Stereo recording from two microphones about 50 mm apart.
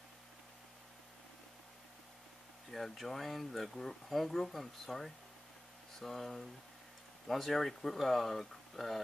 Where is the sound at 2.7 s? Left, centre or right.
Centre.